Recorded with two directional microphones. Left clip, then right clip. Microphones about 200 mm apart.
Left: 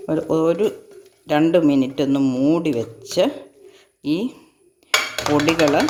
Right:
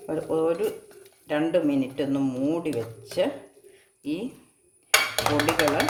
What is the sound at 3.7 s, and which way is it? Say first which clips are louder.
Bird: left 9 dB; 60° left (ahead or behind).